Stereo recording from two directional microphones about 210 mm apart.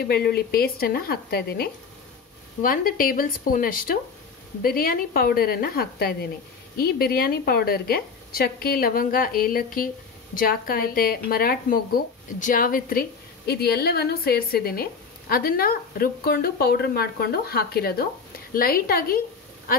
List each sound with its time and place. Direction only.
0.0 s speech: 50° left (ahead or behind)